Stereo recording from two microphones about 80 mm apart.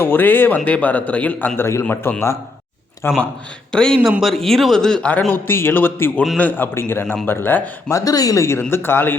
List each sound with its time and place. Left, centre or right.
0.0 s a man's voice: left
3.7 s a man's voice: centre
5.5 s a man's voice: left
6.7 s a man's voice: left
7.9 s a man's voice: left